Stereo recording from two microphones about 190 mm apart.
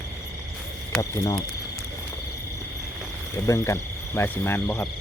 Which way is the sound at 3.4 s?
15° left (ahead or behind).